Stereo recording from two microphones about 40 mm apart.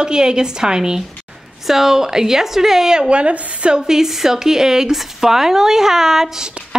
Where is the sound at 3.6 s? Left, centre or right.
Centre.